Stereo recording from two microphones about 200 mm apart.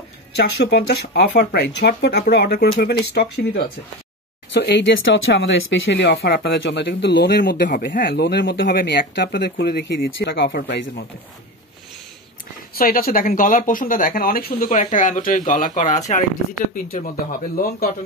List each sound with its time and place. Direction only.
0.4 s speech: 50° left (ahead or behind)
12.7 s speech: 45° left (ahead or behind)